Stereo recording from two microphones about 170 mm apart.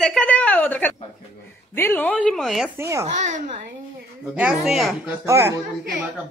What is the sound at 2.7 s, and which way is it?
Speech, 15° right (ahead or behind).